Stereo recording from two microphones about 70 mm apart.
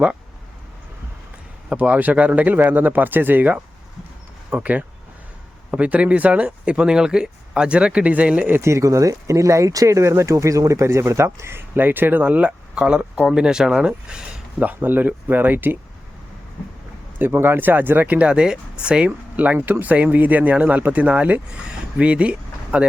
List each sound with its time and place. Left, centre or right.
1.7 s speech: right
8.4 s speech: right
8.7 s speech: right; by 14.4 s centre
14.6 s speech: right
17.2 s speech: right
19.5 s speech: right
21.7 s a sound: centre